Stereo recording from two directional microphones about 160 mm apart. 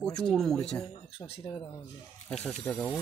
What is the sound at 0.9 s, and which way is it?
Speech, 35° left (ahead or behind).